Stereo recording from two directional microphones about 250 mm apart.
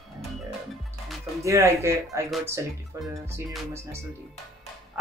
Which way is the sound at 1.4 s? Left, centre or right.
Centre.